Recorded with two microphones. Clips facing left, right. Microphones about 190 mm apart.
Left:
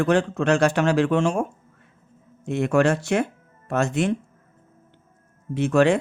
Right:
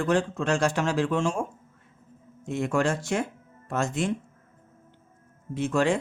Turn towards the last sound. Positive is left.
turn(degrees=70)  # may be behind; listen again after turning